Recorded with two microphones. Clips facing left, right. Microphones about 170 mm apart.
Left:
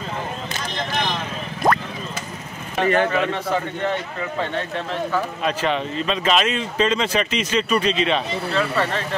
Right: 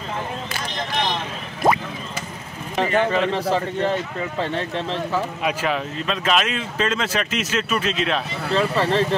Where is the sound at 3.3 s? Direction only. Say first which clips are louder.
Right 2 dB; 35° right (ahead or behind).